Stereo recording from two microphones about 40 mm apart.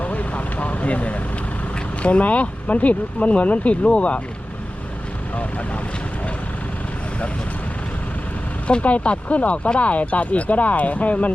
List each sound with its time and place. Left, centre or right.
0.0 s vehicle: left
1.7 s speech: left
5.3 s speech: left
8.6 s speech: left